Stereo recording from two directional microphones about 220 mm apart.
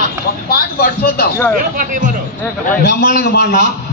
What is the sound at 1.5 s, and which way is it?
Speech, 35° right (ahead or behind).